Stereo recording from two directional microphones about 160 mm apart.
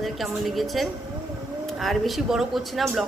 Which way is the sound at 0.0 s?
Centre (ahead or behind).